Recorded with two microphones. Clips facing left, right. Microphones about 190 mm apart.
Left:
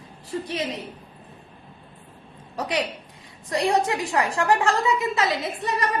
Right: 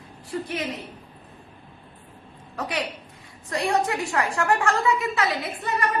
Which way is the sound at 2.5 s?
20° left (ahead or behind).